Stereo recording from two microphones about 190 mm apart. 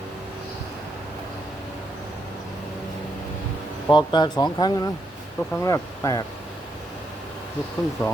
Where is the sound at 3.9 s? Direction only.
25° left (ahead or behind).